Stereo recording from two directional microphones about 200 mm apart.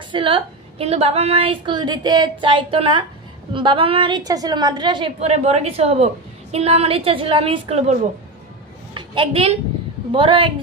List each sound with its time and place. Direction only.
0.1 s a woman's voice: 25° right (ahead or behind)
8.9 s a sound: 25° right (ahead or behind)
10.1 s a woman's voice: 25° right (ahead or behind)